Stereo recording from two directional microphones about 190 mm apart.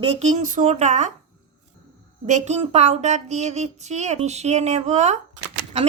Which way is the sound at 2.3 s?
40° right (ahead or behind).